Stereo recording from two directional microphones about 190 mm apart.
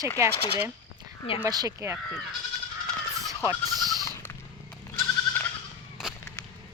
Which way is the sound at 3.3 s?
20° right (ahead or behind).